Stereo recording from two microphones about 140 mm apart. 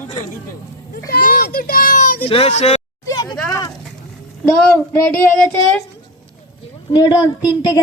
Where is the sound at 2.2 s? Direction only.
45° left (ahead or behind).